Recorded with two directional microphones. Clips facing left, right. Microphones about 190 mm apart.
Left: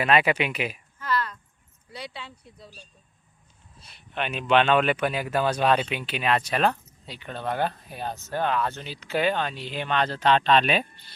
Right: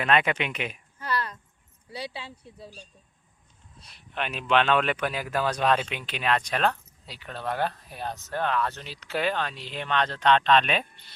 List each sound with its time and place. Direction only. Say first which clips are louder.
0.0 s speech: left 3 dB; 5° left (ahead or behind)
2.6 s speech: right 5 dB; 10° right (ahead or behind)
3.8 s speech: left 2 dB; centre (ahead or behind)